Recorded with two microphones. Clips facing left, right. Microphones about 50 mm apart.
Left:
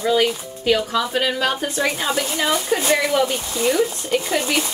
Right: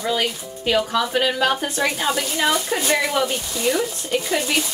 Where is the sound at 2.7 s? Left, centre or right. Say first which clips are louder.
Left 3 dB; centre.